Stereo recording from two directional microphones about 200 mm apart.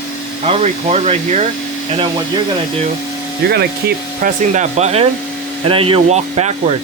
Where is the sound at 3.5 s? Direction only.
50° right (ahead or behind); by 6.5 s 30° right (ahead or behind).